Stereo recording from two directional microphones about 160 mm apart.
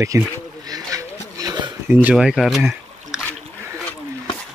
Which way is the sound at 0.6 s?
25° right (ahead or behind).